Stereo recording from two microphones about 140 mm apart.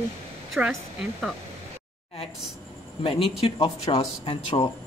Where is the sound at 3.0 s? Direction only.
40° left (ahead or behind).